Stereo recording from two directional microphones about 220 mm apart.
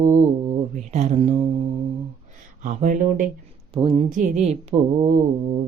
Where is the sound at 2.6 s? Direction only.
35° right (ahead or behind).